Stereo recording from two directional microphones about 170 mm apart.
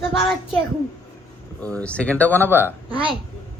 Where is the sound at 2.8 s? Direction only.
30° right (ahead or behind).